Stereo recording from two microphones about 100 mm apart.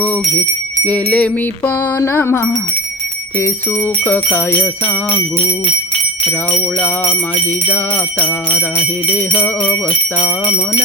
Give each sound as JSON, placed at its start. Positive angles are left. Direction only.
{"t": 0.0, "sound": "speech", "side_deg": 15}
{"t": 0.9, "sound": "wind chime", "side_deg": 10}
{"t": 2.0, "sound": "music", "side_deg": 25}
{"t": 4.0, "sound": "wind chime", "side_deg": 20}
{"t": 5.1, "sound": "jingle bell", "side_deg": 50}
{"t": 6.7, "sound": "wind chime", "side_deg": 15}
{"t": 9.0, "sound": "wind chime", "side_deg": 15}